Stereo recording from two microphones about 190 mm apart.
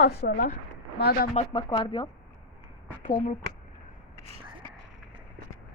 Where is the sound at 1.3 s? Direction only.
35° left (ahead or behind).